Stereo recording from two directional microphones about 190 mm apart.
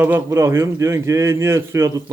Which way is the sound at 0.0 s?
15° right (ahead or behind).